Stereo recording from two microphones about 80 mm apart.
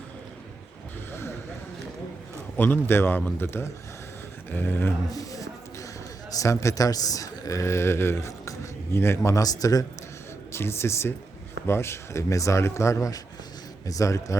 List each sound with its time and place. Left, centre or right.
2.6 s speech: left
5.1 s a sound: left
6.3 s speech: left
10.5 s speech: left